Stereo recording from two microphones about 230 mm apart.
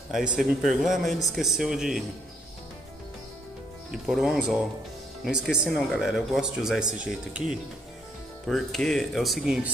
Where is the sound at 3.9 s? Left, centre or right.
Centre.